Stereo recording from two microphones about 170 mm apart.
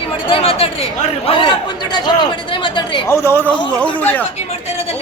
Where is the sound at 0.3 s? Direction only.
35° left (ahead or behind).